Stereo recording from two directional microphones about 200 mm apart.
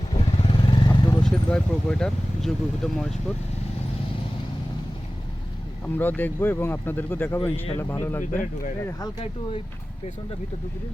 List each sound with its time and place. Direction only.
0.1 s motorcycle: 25° left (ahead or behind)
1.2 s speech: 5° left (ahead or behind)
5.8 s speech: 10° left (ahead or behind)